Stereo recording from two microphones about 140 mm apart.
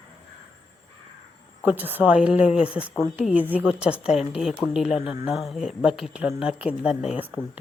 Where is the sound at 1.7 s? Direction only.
10° right (ahead or behind).